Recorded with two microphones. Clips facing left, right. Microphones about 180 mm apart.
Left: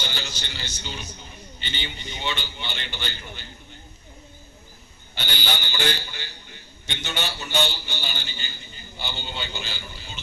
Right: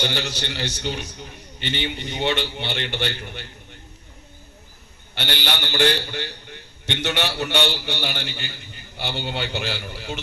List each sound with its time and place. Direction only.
0.0 s a man's voice: 75° right (ahead or behind)
5.1 s a man's voice: 70° right (ahead or behind)